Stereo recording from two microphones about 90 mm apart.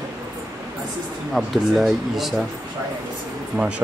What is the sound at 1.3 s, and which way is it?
Speech, centre (ahead or behind).